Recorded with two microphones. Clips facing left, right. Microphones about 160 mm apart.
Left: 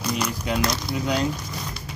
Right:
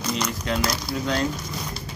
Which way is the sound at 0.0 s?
10° left (ahead or behind).